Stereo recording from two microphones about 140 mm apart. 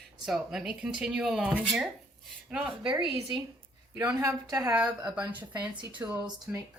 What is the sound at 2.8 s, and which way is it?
Speech, 35° right (ahead or behind).